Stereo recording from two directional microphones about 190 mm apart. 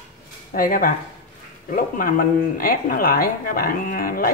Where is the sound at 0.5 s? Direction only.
45° left (ahead or behind).